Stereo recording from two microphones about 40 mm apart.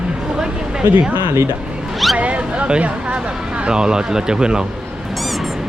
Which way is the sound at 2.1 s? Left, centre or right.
Right.